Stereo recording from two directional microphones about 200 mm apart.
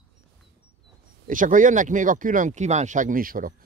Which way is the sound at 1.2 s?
40° right (ahead or behind).